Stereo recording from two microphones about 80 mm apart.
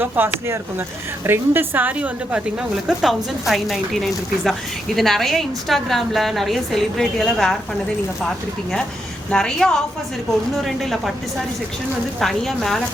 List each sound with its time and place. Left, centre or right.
0.0 s a woman's voice: right
2.8 s a woman's voice: centre
9.3 s a woman's voice: centre
12.2 s a woman's voice: centre